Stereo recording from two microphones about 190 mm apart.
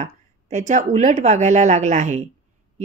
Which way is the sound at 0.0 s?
40° right (ahead or behind).